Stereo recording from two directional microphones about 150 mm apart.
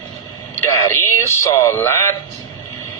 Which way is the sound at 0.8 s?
20° left (ahead or behind).